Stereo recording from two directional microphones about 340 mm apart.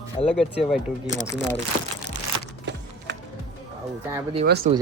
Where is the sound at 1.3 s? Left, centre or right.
Right.